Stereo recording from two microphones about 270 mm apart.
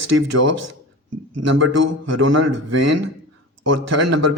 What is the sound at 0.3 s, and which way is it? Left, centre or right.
Speech, right.